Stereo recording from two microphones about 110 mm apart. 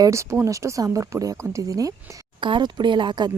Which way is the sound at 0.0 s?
25° right (ahead or behind).